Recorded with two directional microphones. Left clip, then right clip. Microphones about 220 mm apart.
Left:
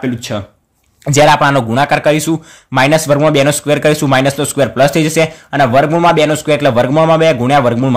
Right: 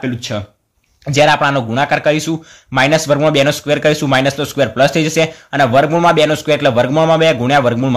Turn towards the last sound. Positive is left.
turn(degrees=10)  # may be behind; listen again after turning